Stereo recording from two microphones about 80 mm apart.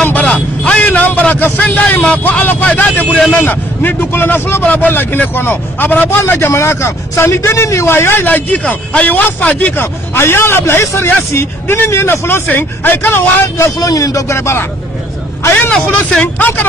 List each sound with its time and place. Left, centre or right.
0.0 s vehicle: centre
3.3 s a man's voice: left
13.7 s speech: left
15.7 s speech: centre